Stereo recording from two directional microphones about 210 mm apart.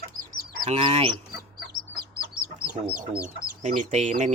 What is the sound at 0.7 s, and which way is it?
Speech, 25° right (ahead or behind).